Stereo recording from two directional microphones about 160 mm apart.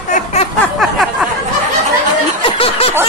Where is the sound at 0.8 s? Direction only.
Centre (ahead or behind).